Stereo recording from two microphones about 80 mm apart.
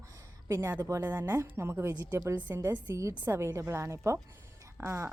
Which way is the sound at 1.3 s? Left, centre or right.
Right.